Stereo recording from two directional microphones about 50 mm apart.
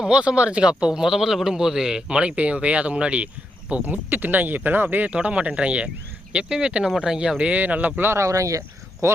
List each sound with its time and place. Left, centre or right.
0.0 s a man's voice: centre
2.0 s a man's voice: right
7.3 s speech: right
8.1 s speech: right